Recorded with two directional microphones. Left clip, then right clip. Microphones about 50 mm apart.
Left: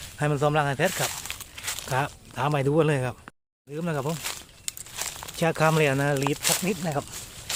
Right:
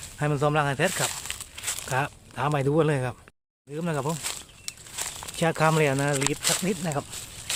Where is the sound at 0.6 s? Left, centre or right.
Centre.